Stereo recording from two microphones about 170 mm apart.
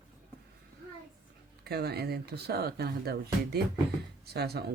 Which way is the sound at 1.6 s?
70° right (ahead or behind).